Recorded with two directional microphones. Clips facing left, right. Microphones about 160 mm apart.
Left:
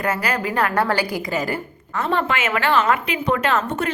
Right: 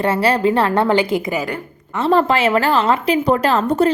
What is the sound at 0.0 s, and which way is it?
A woman's voice, 30° right (ahead or behind).